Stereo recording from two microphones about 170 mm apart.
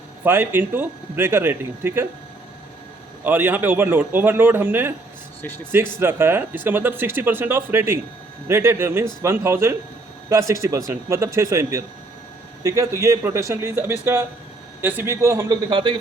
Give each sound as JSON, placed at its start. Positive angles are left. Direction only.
{"t": 0.3, "sound": "speech", "side_deg": -10}
{"t": 3.2, "sound": "speech", "side_deg": -10}